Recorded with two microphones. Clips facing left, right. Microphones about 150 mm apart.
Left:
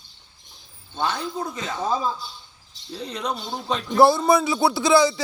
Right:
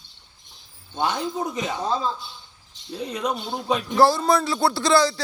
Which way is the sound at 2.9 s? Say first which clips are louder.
Right 2 dB; 10° right (ahead or behind).